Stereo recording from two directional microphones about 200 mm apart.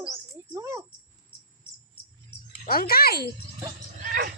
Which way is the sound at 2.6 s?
45° left (ahead or behind).